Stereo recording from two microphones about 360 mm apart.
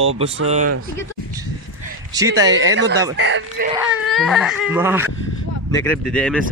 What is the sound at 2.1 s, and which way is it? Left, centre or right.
Speech, centre.